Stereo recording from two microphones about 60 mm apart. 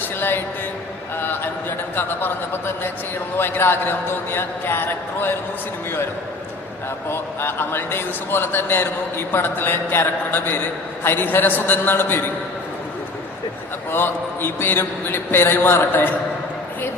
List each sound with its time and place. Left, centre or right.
0.0 s a man's voice: left
2.0 s a man's voice: left
7.1 s a man's voice: left
13.9 s a man's voice: left